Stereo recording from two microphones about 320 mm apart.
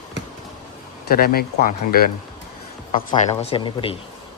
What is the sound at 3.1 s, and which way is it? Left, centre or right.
Speech, centre.